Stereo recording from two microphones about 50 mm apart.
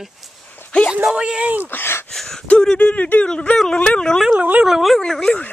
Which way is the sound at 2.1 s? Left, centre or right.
Centre.